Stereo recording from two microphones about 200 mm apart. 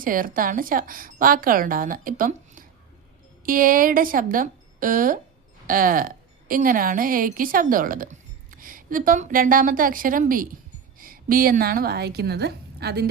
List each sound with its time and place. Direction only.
0.0 s a woman's voice: 45° right (ahead or behind)